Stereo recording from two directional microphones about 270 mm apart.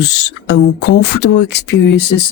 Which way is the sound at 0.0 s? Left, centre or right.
Left.